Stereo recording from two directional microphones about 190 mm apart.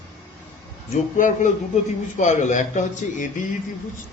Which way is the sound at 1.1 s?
45° left (ahead or behind).